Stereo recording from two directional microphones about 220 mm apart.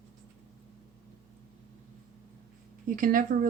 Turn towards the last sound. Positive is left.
turn(degrees=-40)  # may be behind; listen again after turning